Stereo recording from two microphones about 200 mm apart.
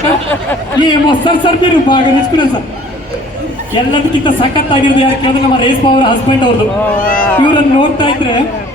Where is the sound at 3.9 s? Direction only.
25° left (ahead or behind).